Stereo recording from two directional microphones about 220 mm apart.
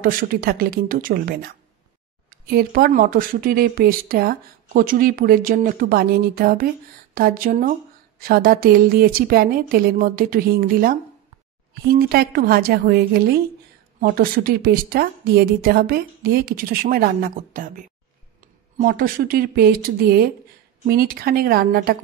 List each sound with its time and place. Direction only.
0.0 s a woman's voice: 40° right (ahead or behind)